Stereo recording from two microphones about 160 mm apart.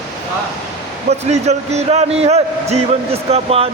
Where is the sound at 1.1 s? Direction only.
45° right (ahead or behind).